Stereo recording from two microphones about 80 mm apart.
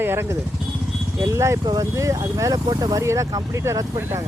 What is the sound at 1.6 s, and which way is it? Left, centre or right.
Speech, right.